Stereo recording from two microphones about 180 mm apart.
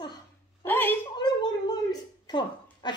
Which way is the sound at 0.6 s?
10° left (ahead or behind).